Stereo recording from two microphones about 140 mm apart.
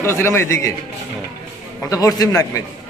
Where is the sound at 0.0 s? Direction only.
20° left (ahead or behind).